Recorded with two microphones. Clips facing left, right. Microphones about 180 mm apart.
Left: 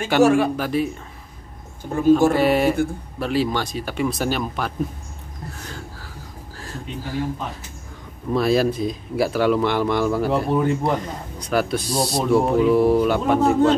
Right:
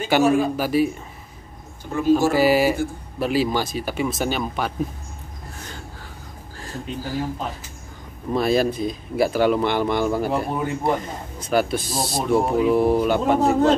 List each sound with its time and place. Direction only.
0.2 s speech: 75° left (ahead or behind)
0.6 s speech: 5° right (ahead or behind)
2.3 s speech: 5° right (ahead or behind)
6.5 s speech: centre (ahead or behind)
8.3 s speech: centre (ahead or behind)